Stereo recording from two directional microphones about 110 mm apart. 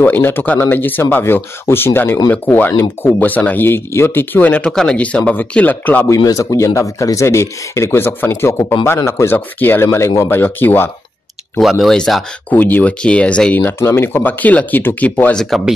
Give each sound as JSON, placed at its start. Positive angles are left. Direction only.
{"t": 0.0, "sound": "speech", "side_deg": 20}
{"t": 6.0, "sound": "speech", "side_deg": 30}
{"t": 11.8, "sound": "speech", "side_deg": 5}
{"t": 12.5, "sound": "speech", "side_deg": 15}
{"t": 13.6, "sound": "speech", "side_deg": 25}